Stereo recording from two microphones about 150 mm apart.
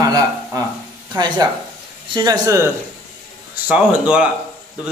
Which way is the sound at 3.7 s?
10° right (ahead or behind).